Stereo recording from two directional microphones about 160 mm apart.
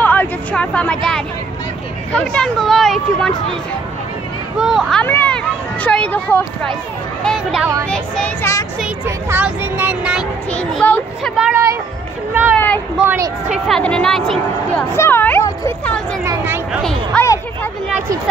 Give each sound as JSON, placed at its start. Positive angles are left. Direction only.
{"t": 0.0, "sound": "a sound", "side_deg": 10}
{"t": 2.1, "sound": "speech", "side_deg": 5}
{"t": 4.6, "sound": "speech", "side_deg": 0}
{"t": 8.8, "sound": "speech", "side_deg": -10}
{"t": 10.5, "sound": "speech", "side_deg": 5}
{"t": 11.5, "sound": "speech", "side_deg": -20}
{"t": 12.5, "sound": "speech", "side_deg": 10}
{"t": 13.0, "sound": "speech", "side_deg": -15}
{"t": 13.7, "sound": "speech", "side_deg": 5}
{"t": 14.9, "sound": "speech", "side_deg": 15}
{"t": 16.3, "sound": "speech", "side_deg": -15}
{"t": 16.8, "sound": "speech", "side_deg": 5}